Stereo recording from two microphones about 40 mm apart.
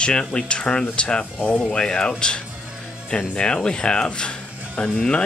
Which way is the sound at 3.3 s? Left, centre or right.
Left.